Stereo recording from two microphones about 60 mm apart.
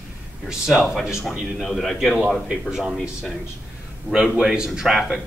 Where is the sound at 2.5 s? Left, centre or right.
Centre.